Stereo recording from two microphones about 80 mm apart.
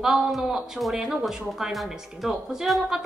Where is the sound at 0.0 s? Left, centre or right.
Centre.